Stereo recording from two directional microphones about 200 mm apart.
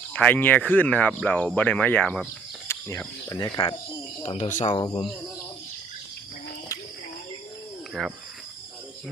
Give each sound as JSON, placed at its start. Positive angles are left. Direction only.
{"t": 0.1, "sound": "speech", "side_deg": 5}
{"t": 2.6, "sound": "cricket", "side_deg": 15}
{"t": 3.2, "sound": "speech", "side_deg": 15}
{"t": 4.2, "sound": "speech", "side_deg": 30}
{"t": 4.7, "sound": "speech", "side_deg": 25}
{"t": 8.0, "sound": "speech", "side_deg": 0}